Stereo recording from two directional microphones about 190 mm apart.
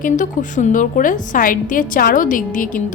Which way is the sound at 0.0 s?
40° left (ahead or behind).